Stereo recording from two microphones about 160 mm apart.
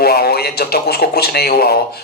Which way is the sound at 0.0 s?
75° left (ahead or behind).